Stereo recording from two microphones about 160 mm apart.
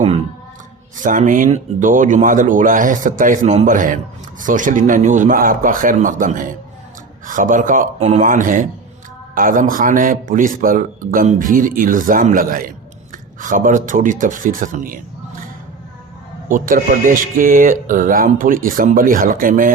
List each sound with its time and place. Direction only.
0.9 s speech: 55° right (ahead or behind)
7.9 s speech: 45° right (ahead or behind)
16.5 s speech: 60° right (ahead or behind)